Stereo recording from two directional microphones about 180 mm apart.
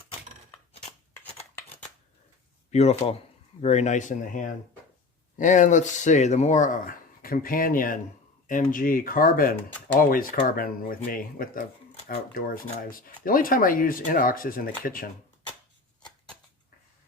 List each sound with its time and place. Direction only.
2.6 s speech: 35° left (ahead or behind)